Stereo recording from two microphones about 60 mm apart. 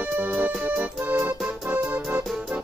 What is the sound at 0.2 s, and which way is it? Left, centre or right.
Music, right.